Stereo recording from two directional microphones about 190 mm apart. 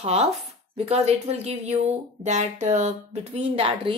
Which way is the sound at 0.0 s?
35° right (ahead or behind).